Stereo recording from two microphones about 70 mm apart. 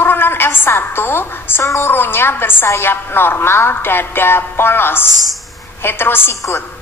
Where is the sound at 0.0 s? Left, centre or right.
Left.